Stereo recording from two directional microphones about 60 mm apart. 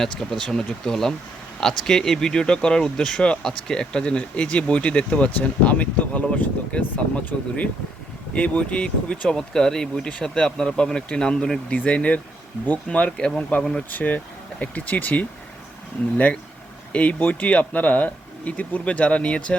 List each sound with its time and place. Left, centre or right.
0.0 s speech: centre; by 13.1 s left
13.1 s speech: centre
13.9 s speech: left